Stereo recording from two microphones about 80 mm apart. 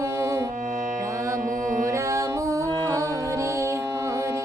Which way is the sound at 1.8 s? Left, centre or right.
Right.